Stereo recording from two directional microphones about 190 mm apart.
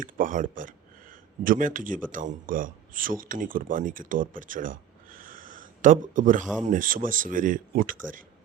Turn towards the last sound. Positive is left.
turn(degrees=-45)  # may be behind; listen again after turning